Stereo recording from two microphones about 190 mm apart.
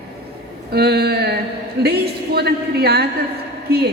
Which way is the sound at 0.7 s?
60° right (ahead or behind).